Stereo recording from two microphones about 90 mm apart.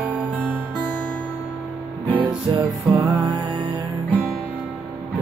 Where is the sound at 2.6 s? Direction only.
20° right (ahead or behind).